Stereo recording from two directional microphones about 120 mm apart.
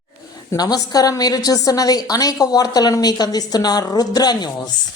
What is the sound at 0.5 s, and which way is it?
A woman's voice, 35° left (ahead or behind).